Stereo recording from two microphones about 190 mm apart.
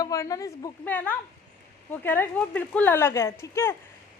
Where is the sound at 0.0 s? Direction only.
20° left (ahead or behind).